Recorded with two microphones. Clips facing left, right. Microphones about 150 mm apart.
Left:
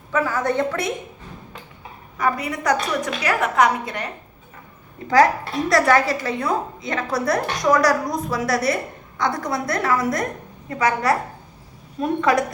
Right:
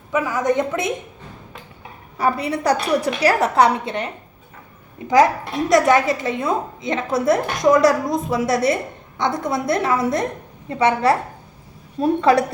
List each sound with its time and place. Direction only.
0.1 s a woman's voice: 15° right (ahead or behind)
2.1 s a woman's voice: 30° right (ahead or behind)